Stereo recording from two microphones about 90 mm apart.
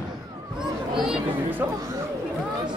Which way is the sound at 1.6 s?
25° right (ahead or behind).